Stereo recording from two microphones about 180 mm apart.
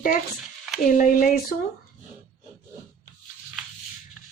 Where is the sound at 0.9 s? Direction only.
45° left (ahead or behind).